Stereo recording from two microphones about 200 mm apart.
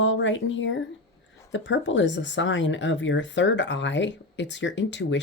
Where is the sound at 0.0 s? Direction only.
65° left (ahead or behind).